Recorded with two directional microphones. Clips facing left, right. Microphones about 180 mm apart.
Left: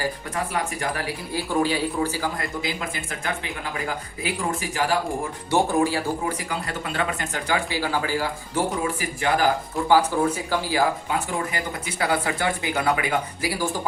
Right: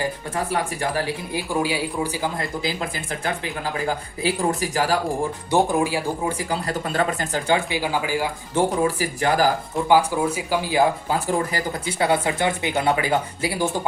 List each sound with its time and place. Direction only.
0.8 s speech: 30° right (ahead or behind)
1.3 s speech: 15° right (ahead or behind)
2.6 s speech: 35° right (ahead or behind)
5.5 s speech: 15° right (ahead or behind)
6.2 s speech: 35° right (ahead or behind); by 8.3 s 15° right (ahead or behind)
8.5 s speech: 35° right (ahead or behind)
9.7 s speech: 15° right (ahead or behind)
11.1 s speech: 30° right (ahead or behind)